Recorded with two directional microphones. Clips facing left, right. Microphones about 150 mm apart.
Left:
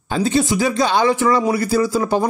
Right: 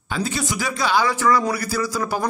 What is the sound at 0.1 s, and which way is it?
Speech, 35° left (ahead or behind).